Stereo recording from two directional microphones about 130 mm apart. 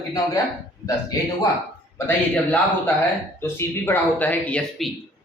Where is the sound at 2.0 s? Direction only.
15° left (ahead or behind).